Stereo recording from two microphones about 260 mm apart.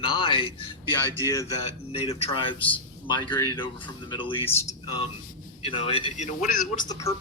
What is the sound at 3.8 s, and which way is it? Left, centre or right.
Speech, centre.